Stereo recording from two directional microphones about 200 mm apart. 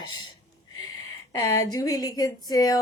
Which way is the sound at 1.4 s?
15° left (ahead or behind).